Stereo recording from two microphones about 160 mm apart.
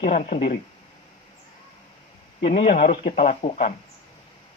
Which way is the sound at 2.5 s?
50° left (ahead or behind).